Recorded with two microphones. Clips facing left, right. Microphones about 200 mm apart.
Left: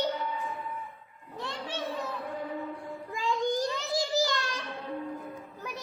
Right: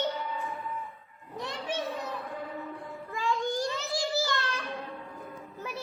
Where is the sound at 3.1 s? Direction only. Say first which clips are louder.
Left 1 dB; 20° left (ahead or behind).